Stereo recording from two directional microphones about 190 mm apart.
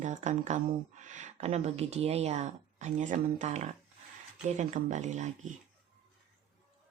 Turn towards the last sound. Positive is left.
turn(degrees=-40)  # may be behind; listen again after turning